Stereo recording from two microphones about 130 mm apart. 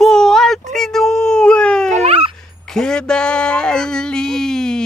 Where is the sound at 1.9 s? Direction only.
50° right (ahead or behind).